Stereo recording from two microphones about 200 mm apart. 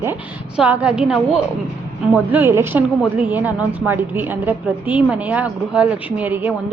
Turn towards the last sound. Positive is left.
turn(degrees=-10)  # may be behind; listen again after turning